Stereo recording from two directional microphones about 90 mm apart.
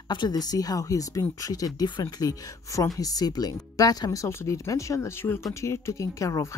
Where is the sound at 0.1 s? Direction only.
50° left (ahead or behind).